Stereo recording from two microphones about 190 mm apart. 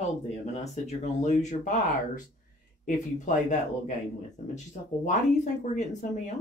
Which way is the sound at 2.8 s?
40° left (ahead or behind).